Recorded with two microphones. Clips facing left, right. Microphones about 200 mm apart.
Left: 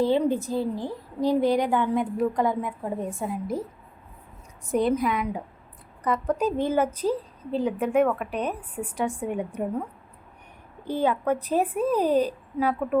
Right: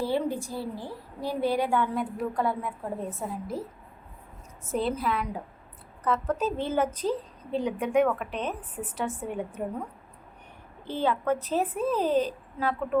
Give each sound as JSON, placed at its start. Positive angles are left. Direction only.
{"t": 0.0, "sound": "a woman's voice", "side_deg": 20}
{"t": 4.6, "sound": "a woman's voice", "side_deg": 15}
{"t": 10.8, "sound": "a woman's voice", "side_deg": 15}